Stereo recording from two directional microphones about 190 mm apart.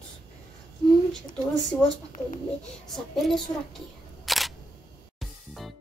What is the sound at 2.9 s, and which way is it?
Speech, centre (ahead or behind).